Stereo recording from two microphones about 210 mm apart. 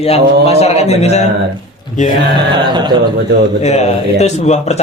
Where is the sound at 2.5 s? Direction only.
20° right (ahead or behind).